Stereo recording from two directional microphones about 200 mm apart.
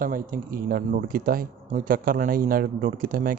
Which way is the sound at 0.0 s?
45° right (ahead or behind).